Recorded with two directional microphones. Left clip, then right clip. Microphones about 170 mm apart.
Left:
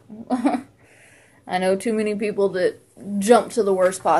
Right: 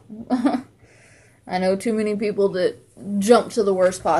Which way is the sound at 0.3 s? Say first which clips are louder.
Even; centre (ahead or behind).